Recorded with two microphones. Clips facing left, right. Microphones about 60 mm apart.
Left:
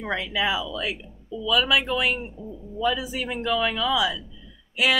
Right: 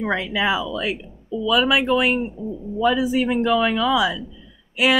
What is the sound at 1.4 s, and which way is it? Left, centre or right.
Speech, right.